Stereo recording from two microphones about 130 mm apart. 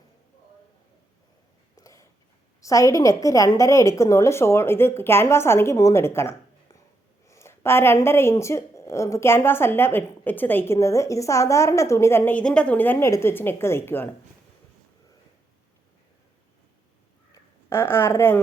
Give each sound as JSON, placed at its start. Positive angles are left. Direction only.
{"t": 1.7, "sound": "a sound", "side_deg": 25}
{"t": 2.6, "sound": "a woman's voice", "side_deg": 25}
{"t": 17.3, "sound": "speech", "side_deg": 20}